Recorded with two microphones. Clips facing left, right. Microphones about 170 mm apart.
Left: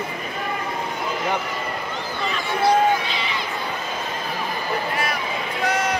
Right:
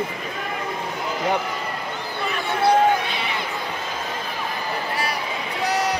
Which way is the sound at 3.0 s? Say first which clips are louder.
Even; 55° right (ahead or behind).